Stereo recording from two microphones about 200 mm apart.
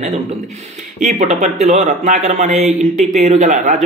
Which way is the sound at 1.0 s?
35° right (ahead or behind).